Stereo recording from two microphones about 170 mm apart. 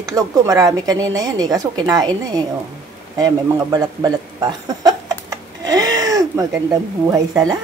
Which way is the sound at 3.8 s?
20° right (ahead or behind).